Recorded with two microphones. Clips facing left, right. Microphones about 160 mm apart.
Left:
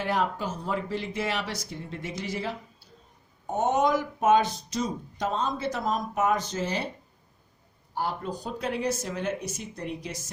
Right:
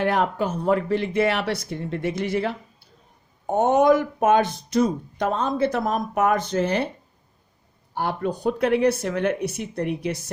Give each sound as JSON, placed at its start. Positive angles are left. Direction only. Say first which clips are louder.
{"t": 0.0, "sound": "speech", "louder": "right 6 dB", "side_deg": -60}
{"t": 7.9, "sound": "speech", "louder": "right 5 dB", "side_deg": -65}